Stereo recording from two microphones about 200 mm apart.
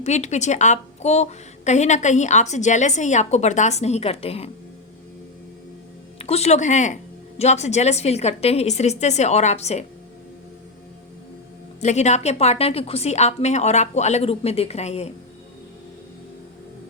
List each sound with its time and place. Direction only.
0.0 s a woman's voice: 35° left (ahead or behind)
6.1 s a woman's voice: 30° left (ahead or behind)
11.8 s a woman's voice: 35° left (ahead or behind)